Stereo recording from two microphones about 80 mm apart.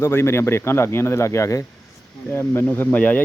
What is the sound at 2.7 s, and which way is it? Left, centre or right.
Speech, left.